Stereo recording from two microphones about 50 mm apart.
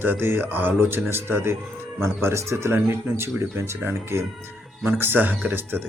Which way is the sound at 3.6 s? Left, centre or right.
Right.